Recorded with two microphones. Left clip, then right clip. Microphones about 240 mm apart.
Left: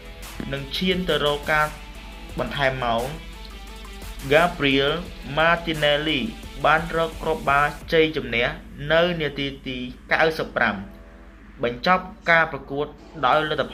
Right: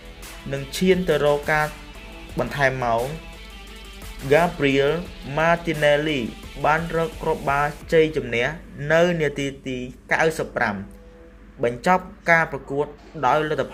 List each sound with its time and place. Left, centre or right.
0.5 s speech: right
4.3 s speech: right